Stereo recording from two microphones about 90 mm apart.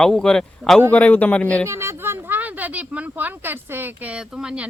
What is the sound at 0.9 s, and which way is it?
Speech, 15° left (ahead or behind).